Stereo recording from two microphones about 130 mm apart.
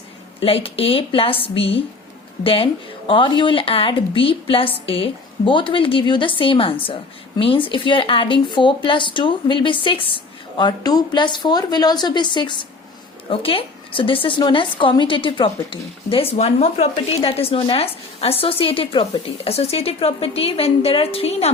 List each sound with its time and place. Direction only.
0.3 s a woman's voice: 45° left (ahead or behind)
10.6 s a woman's voice: 30° left (ahead or behind); by 21.5 s 50° left (ahead or behind)